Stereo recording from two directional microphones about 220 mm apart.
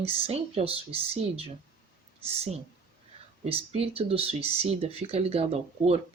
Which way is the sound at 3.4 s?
25° right (ahead or behind).